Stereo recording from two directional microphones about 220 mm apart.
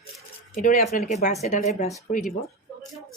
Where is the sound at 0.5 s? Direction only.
35° left (ahead or behind).